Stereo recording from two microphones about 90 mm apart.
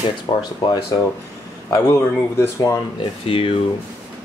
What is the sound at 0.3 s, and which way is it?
Speech, 90° left.